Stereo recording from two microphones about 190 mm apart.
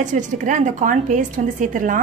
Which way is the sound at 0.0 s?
40° right (ahead or behind).